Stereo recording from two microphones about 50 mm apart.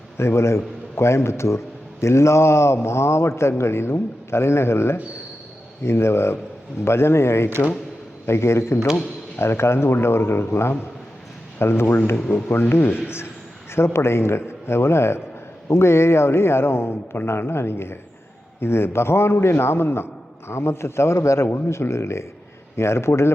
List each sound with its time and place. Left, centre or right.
0.2 s a man's voice: left